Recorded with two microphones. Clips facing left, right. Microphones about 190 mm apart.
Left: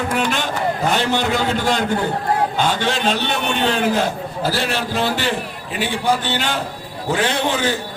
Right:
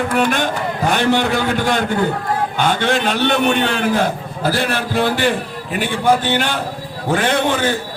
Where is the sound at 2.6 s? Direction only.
55° right (ahead or behind).